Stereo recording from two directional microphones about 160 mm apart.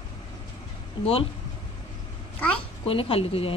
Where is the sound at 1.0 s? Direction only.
30° left (ahead or behind).